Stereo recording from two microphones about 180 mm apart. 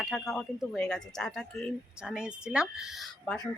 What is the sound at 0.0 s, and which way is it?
Speech, centre (ahead or behind).